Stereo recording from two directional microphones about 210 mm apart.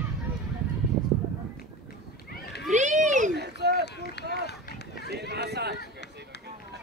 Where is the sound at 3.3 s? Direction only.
50° right (ahead or behind).